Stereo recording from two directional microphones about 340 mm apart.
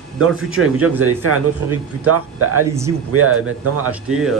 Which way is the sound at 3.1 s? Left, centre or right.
Right.